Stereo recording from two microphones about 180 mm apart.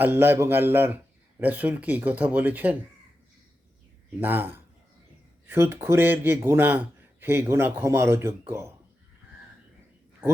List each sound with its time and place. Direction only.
0.0 s speech: 10° right (ahead or behind)
4.2 s speech: 10° right (ahead or behind)
10.2 s speech: 10° right (ahead or behind)